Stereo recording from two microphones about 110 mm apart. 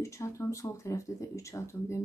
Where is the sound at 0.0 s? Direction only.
25° left (ahead or behind).